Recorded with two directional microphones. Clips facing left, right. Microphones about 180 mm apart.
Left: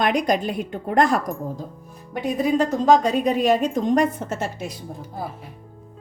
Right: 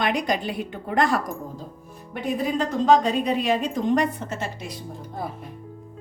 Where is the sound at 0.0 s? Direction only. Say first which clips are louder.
Left 4 dB; 45° left (ahead or behind).